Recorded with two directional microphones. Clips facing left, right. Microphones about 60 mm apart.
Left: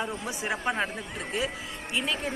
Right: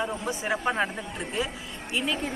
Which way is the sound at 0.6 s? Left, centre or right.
Centre.